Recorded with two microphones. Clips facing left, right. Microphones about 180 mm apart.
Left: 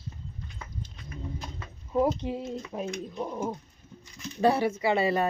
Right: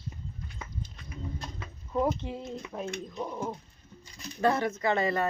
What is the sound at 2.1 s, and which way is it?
Speech, 15° left (ahead or behind).